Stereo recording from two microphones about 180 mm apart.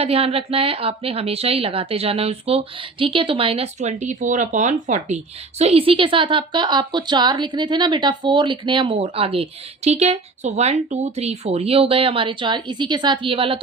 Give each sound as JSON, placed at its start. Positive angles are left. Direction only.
{"t": 0.0, "sound": "a woman's voice", "side_deg": -35}